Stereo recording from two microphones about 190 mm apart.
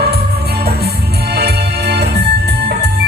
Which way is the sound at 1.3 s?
60° right (ahead or behind).